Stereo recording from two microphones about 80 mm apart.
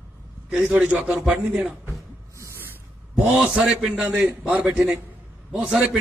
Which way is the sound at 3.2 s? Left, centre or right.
Centre.